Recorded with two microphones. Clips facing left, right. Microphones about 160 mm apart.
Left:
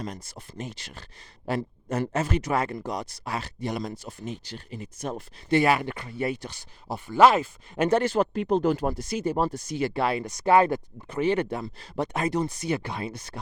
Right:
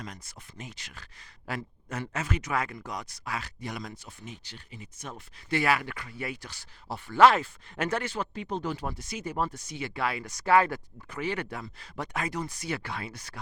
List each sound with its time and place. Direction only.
0.0 s speech: 35° left (ahead or behind)
5.5 s speech: 20° left (ahead or behind)
8.0 s speech: 40° left (ahead or behind); by 13.4 s 25° left (ahead or behind)